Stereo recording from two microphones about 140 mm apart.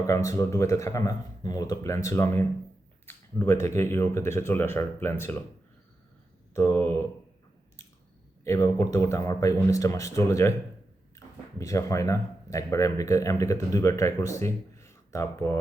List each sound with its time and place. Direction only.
0.1 s speech: 20° left (ahead or behind)
6.5 s speech: 20° left (ahead or behind)
8.4 s speech: 20° left (ahead or behind)
11.6 s speech: 25° left (ahead or behind)